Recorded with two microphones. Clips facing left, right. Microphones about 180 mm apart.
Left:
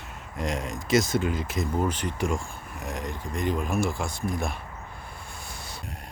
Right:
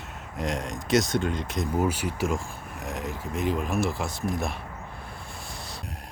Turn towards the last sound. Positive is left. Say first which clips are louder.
# right 1 dB
turn(degrees=0)  # may be behind; listen again after turning